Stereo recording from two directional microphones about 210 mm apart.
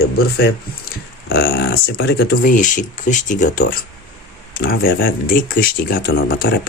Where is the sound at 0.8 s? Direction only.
45° left (ahead or behind).